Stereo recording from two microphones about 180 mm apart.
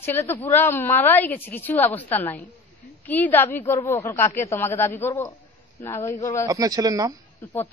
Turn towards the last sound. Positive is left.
turn(degrees=10)  # may be behind; listen again after turning